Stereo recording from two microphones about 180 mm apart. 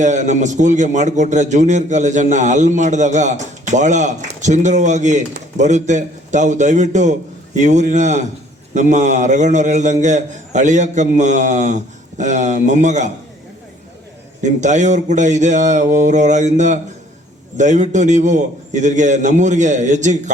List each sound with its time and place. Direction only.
0.0 s a man's voice: 40° right (ahead or behind)
14.4 s a man's voice: 40° right (ahead or behind)